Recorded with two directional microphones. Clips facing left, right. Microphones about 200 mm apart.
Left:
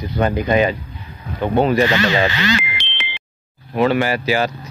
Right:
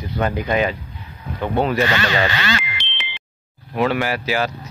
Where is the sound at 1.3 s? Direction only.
20° left (ahead or behind).